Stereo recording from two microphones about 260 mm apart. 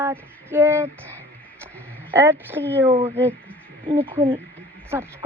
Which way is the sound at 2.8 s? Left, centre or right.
Right.